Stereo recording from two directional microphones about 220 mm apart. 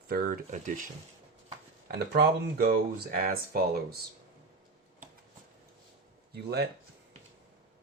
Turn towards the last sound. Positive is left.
turn(degrees=-45)  # may be behind; listen again after turning